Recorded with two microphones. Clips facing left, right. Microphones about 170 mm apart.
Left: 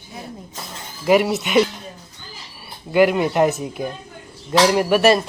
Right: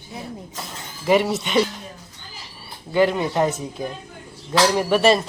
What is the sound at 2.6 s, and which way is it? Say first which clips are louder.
A man's voice: left 3 dB; 10° left (ahead or behind).